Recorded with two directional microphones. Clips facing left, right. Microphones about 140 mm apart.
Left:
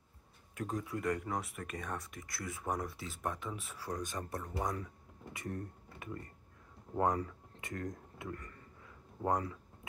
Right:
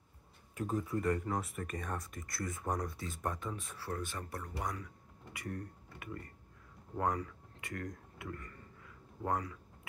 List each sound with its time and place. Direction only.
0.6 s speech: 5° right (ahead or behind); by 9.6 s 25° left (ahead or behind)